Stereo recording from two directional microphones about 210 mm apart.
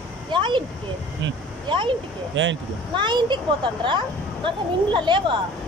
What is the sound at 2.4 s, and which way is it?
Speech, 65° right (ahead or behind).